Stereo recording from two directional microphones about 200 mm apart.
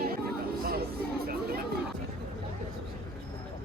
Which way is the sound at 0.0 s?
50° right (ahead or behind).